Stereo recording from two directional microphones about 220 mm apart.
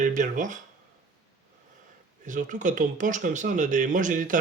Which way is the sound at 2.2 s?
35° right (ahead or behind).